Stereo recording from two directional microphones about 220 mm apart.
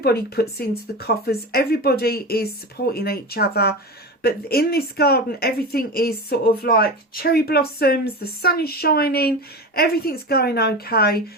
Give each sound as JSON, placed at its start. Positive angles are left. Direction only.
{"t": 0.0, "sound": "speech", "side_deg": 45}